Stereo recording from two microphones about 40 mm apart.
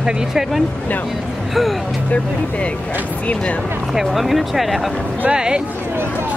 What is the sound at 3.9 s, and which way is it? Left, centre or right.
Speech, centre.